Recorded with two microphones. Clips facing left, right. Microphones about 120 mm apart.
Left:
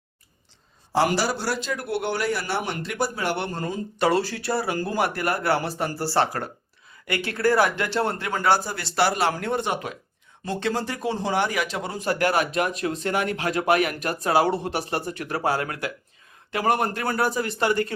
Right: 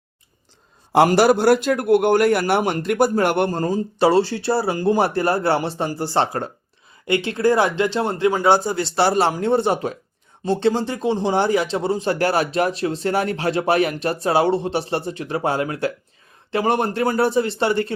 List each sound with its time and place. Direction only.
1.0 s a man's voice: 55° right (ahead or behind); by 17.9 s 30° right (ahead or behind)